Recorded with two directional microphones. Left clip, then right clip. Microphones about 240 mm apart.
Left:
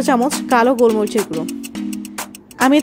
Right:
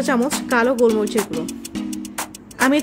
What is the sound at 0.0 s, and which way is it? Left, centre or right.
Speech, left.